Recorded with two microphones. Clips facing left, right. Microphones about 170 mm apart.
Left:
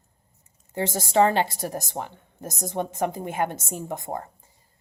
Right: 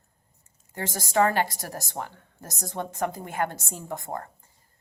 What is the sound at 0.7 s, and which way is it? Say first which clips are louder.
A woman's voice: left 3 dB; 25° left (ahead or behind).